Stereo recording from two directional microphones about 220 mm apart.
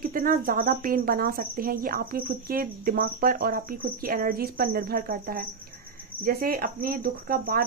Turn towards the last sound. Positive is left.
turn(degrees=-45)  # may be behind; listen again after turning